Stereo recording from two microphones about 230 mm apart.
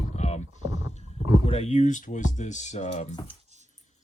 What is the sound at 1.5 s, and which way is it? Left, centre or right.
Speech, left.